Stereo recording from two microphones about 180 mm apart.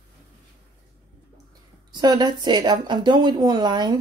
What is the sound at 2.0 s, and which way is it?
Speech, 20° right (ahead or behind).